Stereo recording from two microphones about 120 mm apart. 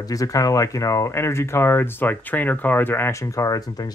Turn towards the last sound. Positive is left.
turn(degrees=35)  # may be behind; listen again after turning